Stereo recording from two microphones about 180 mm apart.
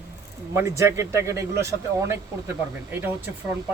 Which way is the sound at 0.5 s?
15° right (ahead or behind).